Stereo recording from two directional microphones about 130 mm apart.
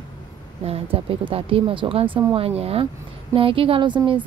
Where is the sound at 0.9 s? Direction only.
45° right (ahead or behind).